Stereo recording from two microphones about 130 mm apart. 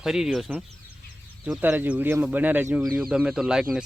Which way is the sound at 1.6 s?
15° right (ahead or behind).